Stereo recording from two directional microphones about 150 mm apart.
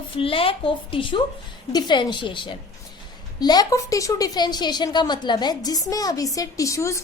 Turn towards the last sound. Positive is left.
turn(degrees=20)  # may be behind; listen again after turning